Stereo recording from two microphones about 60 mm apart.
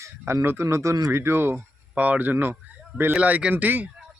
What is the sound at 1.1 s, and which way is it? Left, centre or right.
Speech, right.